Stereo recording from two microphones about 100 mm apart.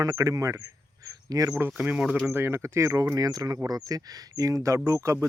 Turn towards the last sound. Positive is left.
turn(degrees=-30)  # may be behind; listen again after turning